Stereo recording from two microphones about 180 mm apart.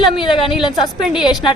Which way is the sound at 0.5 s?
Centre (ahead or behind).